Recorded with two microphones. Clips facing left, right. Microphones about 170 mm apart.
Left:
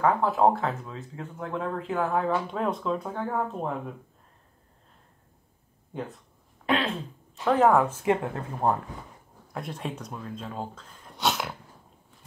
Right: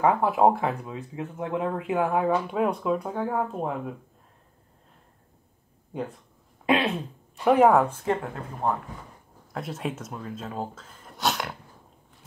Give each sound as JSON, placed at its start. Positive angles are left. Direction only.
{"t": 0.0, "sound": "speech", "side_deg": -15}
{"t": 6.6, "sound": "a sound", "side_deg": -20}
{"t": 7.4, "sound": "speech", "side_deg": -10}
{"t": 8.1, "sound": "speech", "side_deg": 15}
{"t": 9.5, "sound": "speech", "side_deg": -5}